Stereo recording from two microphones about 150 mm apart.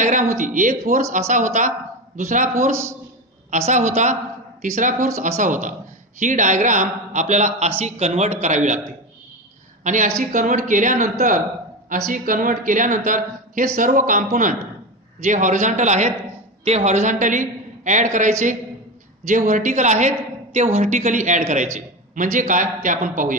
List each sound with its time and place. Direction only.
0.0 s a sound: 55° right (ahead or behind)
0.4 s a man's voice: 60° right (ahead or behind)
2.7 s a man's voice: 15° right (ahead or behind)
3.4 s a woman's voice: 50° right (ahead or behind)
9.8 s a man's voice: 55° right (ahead or behind)
15.2 s a man's voice: 55° right (ahead or behind)